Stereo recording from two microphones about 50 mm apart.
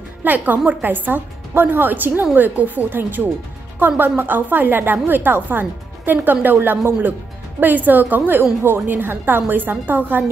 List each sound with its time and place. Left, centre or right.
0.2 s speech: right